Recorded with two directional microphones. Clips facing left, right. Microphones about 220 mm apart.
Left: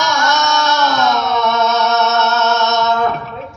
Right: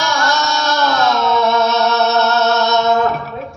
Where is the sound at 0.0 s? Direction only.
30° right (ahead or behind).